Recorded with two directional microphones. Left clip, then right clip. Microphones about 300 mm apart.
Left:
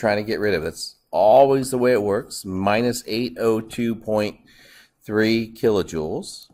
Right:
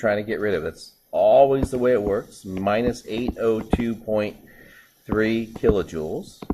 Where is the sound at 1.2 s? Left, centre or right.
Left.